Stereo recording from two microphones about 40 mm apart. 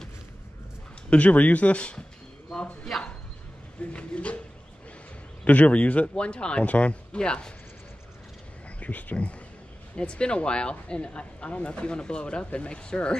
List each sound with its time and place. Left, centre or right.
1.1 s speech: left
2.5 s a sound: centre
2.9 s chopping: centre
3.9 s a sound: left
5.4 s speech: left
8.6 s speech: left
9.9 s speech: left